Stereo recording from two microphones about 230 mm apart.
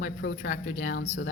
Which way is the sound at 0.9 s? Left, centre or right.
Left.